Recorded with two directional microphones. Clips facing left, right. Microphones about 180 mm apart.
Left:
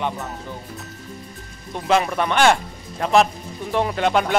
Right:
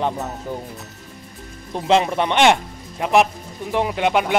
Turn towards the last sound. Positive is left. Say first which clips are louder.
# even
turn(degrees=-15)  # may be behind; listen again after turning